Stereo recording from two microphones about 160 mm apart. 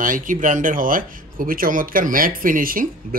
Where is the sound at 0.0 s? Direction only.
55° right (ahead or behind).